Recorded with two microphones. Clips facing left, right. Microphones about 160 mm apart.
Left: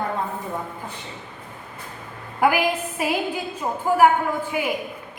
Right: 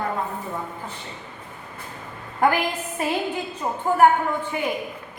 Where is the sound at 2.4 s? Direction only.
5° left (ahead or behind).